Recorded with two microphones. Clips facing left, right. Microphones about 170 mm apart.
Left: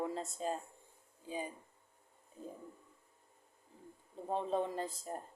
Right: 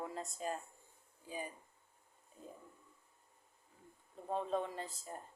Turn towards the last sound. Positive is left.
turn(degrees=40)  # may be behind; listen again after turning